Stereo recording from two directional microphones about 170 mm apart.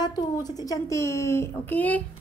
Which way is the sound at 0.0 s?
25° left (ahead or behind).